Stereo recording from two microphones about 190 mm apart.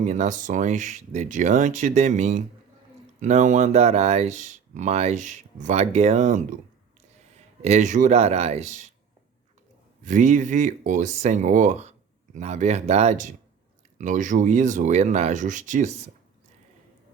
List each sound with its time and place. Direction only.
0.0 s speech: 40° right (ahead or behind)
7.6 s speech: 40° right (ahead or behind)
10.0 s speech: 40° right (ahead or behind)